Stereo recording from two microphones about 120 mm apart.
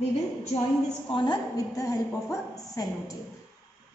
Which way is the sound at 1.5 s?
25° left (ahead or behind).